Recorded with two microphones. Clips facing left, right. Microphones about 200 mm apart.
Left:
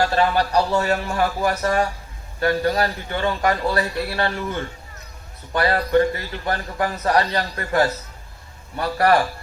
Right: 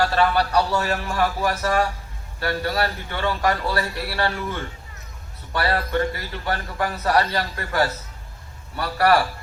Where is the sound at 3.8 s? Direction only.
20° left (ahead or behind).